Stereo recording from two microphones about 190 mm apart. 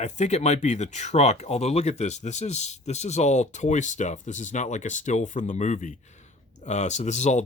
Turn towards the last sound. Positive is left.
turn(degrees=35)  # may be behind; listen again after turning